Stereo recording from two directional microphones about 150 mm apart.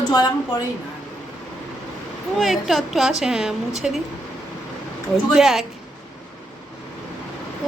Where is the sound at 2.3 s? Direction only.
Centre (ahead or behind).